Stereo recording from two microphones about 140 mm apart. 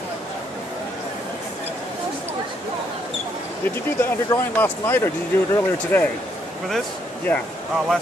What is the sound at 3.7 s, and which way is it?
Speech, 15° left (ahead or behind).